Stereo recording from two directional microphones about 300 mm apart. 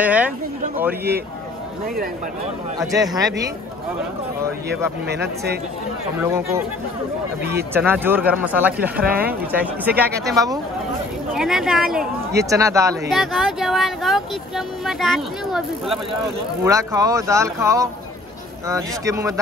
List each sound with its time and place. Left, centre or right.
0.0 s speech: centre
2.8 s speech: centre
4.6 s speech: right
6.1 s speech: centre
7.7 s speech: centre
11.3 s speech: centre
16.6 s speech: centre